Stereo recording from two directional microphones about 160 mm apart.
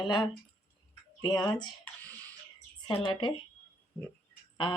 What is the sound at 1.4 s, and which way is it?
Speech, 25° left (ahead or behind).